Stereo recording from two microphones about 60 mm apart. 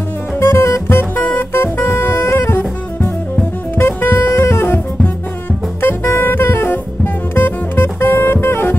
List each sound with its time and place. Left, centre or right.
0.4 s music: left
5.8 s saxophone: left
7.3 s music: left